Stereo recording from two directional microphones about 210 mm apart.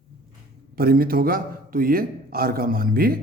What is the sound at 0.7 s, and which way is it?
A man's voice, 45° right (ahead or behind).